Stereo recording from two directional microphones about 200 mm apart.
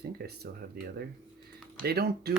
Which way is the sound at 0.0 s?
55° right (ahead or behind).